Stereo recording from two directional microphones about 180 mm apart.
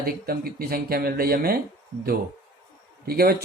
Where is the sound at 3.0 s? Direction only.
55° right (ahead or behind).